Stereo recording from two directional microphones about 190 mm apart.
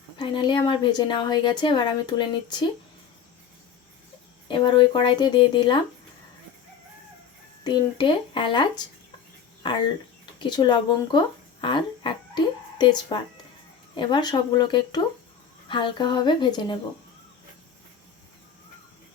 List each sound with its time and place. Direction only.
0.2 s a woman's voice: 25° left (ahead or behind)
4.4 s a woman's voice: 25° left (ahead or behind)
7.6 s a woman's voice: 25° left (ahead or behind)
10.4 s a woman's voice: 25° left (ahead or behind)
11.6 s a sound: 25° left (ahead or behind)
12.8 s a woman's voice: 25° left (ahead or behind)